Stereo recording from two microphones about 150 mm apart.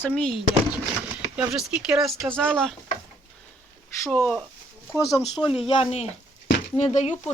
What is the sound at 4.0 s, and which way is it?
Speech, 10° left (ahead or behind).